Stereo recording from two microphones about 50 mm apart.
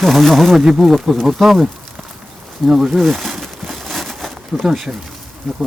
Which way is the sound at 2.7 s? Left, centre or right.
Centre.